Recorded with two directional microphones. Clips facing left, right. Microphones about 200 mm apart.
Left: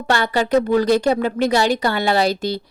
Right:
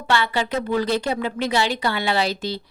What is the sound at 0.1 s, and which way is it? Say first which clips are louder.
Speech: left 5 dB; 45° left (ahead or behind).